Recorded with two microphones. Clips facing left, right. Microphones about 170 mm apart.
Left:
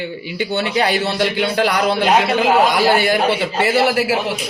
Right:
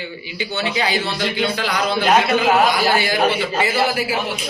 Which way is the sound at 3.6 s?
70° left (ahead or behind).